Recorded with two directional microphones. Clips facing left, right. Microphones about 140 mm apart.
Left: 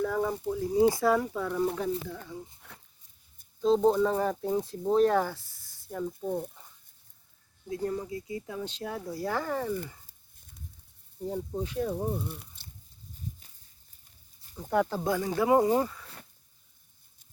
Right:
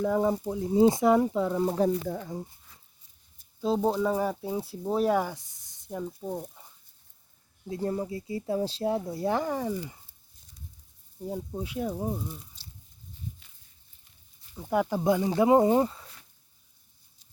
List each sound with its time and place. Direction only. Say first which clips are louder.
0.0 s speech: right 3 dB; 20° right (ahead or behind)
2.0 s speech: right 6 dB; 45° right (ahead or behind)
2.6 s a sound: left 7 dB; 70° left (ahead or behind)
3.6 s speech: left 3 dB; 5° right (ahead or behind)
7.7 s speech: right 2 dB; 25° right (ahead or behind)
11.3 s speech: left 1 dB; 10° right (ahead or behind)
12.3 s speech: even; 65° left (ahead or behind)
14.7 s speech: right 2 dB; 10° right (ahead or behind)